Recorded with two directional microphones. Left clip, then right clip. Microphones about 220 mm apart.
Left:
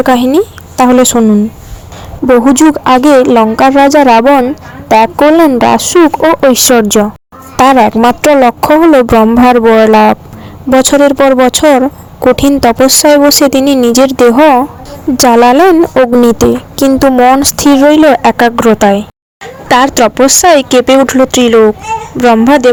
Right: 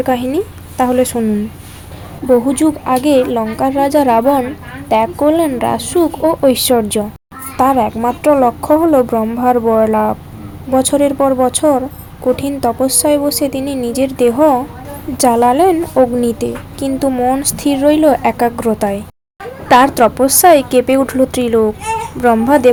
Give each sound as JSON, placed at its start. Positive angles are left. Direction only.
{"t": 0.0, "sound": "a woman's voice", "side_deg": 35}
{"t": 7.5, "sound": "a woman's voice", "side_deg": 45}